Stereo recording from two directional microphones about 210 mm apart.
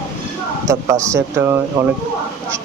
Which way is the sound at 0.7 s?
15° right (ahead or behind).